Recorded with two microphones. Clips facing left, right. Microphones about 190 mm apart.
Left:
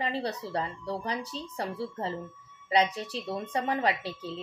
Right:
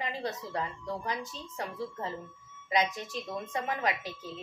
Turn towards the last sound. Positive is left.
turn(degrees=30)  # may be behind; listen again after turning